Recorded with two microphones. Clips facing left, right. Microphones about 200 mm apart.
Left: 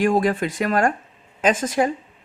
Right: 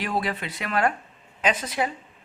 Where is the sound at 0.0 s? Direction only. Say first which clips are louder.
Left 9 dB; 45° left (ahead or behind).